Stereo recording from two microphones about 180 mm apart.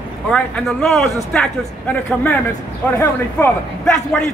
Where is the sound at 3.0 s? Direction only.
10° left (ahead or behind).